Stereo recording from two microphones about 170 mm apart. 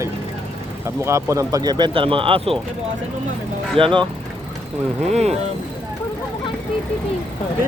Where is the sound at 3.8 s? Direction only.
30° right (ahead or behind).